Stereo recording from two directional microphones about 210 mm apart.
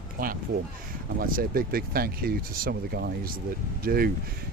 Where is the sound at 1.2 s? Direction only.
45° right (ahead or behind).